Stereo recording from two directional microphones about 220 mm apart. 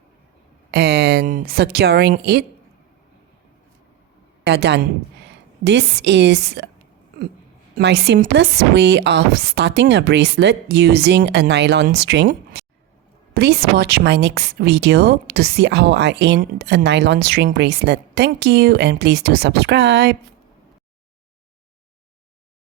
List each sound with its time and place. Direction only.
0.7 s speech: 45° right (ahead or behind)
4.4 s speech: 50° right (ahead or behind)
7.8 s speech: 50° right (ahead or behind)